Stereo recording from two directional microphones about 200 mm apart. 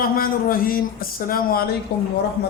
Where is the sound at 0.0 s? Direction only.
45° left (ahead or behind).